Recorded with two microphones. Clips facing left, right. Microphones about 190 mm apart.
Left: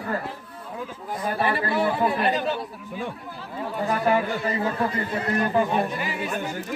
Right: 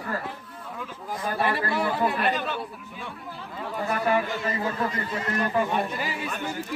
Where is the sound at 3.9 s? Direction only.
30° left (ahead or behind).